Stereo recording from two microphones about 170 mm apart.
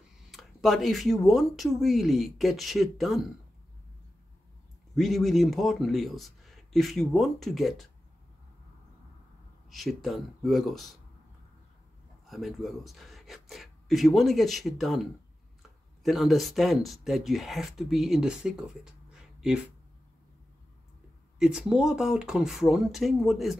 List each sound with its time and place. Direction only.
0.3 s speech: centre (ahead or behind)
4.9 s speech: centre (ahead or behind)
9.7 s speech: centre (ahead or behind)
12.3 s speech: centre (ahead or behind)
21.4 s speech: 5° right (ahead or behind)